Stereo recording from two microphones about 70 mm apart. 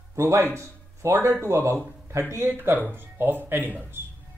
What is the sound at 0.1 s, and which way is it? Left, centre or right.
Speech, right.